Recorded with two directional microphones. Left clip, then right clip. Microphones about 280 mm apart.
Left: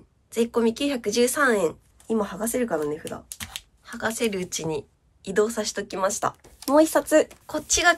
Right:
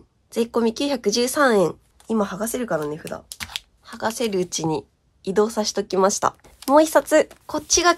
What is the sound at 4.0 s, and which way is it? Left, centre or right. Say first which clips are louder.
A woman's voice: right 3 dB; centre.